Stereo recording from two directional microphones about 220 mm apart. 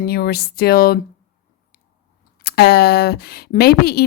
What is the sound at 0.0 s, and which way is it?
Speech, 45° left (ahead or behind).